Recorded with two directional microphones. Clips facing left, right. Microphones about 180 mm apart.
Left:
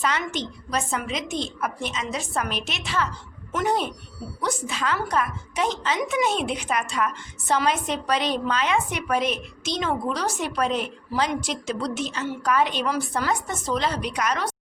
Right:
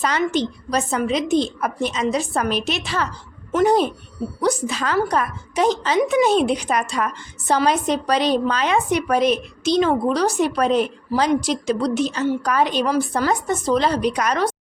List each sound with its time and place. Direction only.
0.0 s a woman's voice: 35° right (ahead or behind)